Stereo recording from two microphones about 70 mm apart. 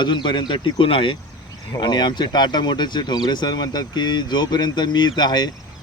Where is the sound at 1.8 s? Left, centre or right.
Left.